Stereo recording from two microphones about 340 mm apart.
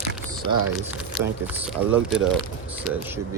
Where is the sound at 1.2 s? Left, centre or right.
Centre.